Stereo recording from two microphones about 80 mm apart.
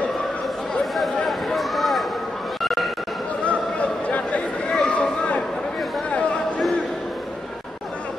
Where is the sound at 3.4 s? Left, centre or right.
Centre.